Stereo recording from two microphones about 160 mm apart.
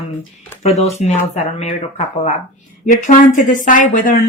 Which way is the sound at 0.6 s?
40° left (ahead or behind).